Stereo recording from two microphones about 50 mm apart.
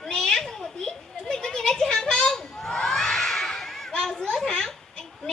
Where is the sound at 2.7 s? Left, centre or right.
Centre.